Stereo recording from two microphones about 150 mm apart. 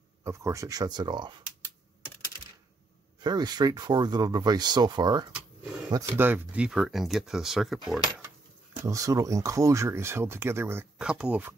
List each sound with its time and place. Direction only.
0.2 s speech: 20° right (ahead or behind)
3.3 s speech: 30° right (ahead or behind)
5.3 s a sound: 5° right (ahead or behind)
6.1 s speech: 10° right (ahead or behind)
8.8 s speech: 20° right (ahead or behind)
11.0 s speech: 5° right (ahead or behind)